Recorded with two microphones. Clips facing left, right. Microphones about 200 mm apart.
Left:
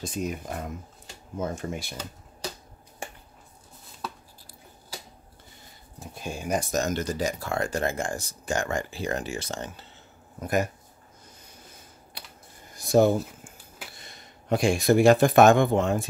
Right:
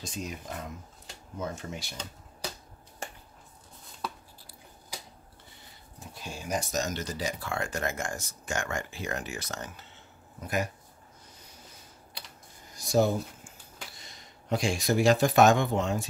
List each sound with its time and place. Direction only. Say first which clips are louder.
0.0 s speech: left 7 dB; 55° left (ahead or behind)
6.2 s speech: left 5 dB; 55° left (ahead or behind); by 9.8 s 30° left (ahead or behind)
10.4 s speech: left 5 dB; 45° left (ahead or behind)
12.7 s a sound: left 5 dB; 55° left (ahead or behind)
13.9 s speech: left 3 dB; 55° left (ahead or behind)